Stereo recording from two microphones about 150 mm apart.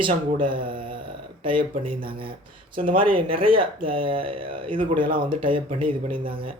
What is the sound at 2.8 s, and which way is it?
Speech, 65° right (ahead or behind).